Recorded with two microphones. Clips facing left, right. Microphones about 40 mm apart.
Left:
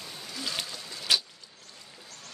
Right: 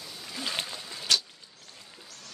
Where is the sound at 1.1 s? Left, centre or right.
Centre.